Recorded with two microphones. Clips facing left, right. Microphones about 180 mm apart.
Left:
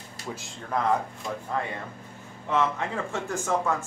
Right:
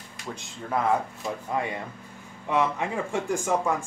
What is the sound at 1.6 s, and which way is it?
Speech, 15° right (ahead or behind).